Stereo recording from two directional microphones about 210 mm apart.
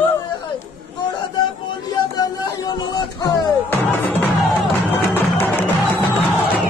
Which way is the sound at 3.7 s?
10° left (ahead or behind).